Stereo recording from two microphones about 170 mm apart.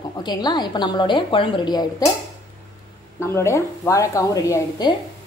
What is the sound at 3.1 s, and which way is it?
A woman's voice, 15° left (ahead or behind).